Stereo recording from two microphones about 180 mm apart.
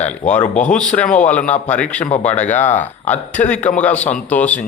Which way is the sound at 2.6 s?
40° left (ahead or behind).